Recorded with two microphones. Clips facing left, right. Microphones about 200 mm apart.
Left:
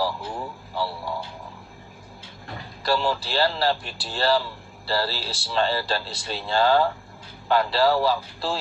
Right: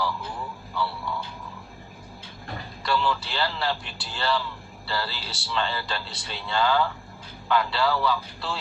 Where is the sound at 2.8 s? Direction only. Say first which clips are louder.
Left 2 dB; 35° left (ahead or behind).